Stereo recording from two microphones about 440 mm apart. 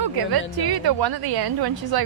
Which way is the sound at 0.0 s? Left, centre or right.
Right.